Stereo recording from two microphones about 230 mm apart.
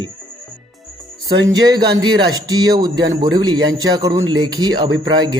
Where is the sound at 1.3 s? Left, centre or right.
Centre.